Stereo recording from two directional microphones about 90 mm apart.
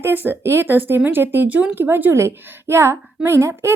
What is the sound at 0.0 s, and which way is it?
A woman's voice, 25° right (ahead or behind).